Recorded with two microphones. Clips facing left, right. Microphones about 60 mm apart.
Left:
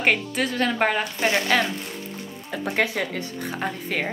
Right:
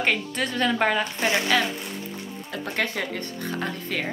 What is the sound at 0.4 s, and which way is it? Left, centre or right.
Speech, centre.